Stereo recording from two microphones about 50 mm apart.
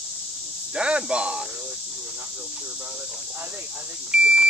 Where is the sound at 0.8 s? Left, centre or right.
Centre.